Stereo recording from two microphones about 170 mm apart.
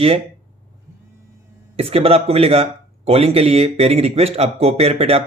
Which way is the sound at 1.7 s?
35° right (ahead or behind).